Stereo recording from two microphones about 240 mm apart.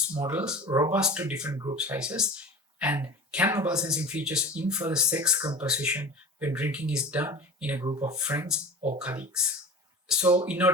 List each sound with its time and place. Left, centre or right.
0.2 s speech: centre
1.5 s speech: centre
1.7 s speech: centre
5.4 s speech: centre
5.6 s speech: centre